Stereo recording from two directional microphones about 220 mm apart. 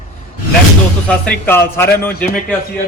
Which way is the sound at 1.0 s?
5° left (ahead or behind).